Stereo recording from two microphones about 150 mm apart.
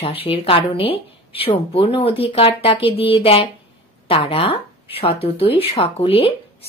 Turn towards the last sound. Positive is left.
turn(degrees=40)  # may be behind; listen again after turning